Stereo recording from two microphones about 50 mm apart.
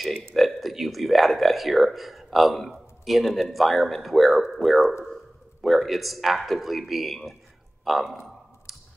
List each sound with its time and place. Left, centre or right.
0.1 s speech: centre
0.4 s speech: centre
8.7 s clicking: centre